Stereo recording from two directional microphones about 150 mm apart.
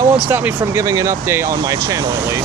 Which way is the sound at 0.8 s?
20° right (ahead or behind).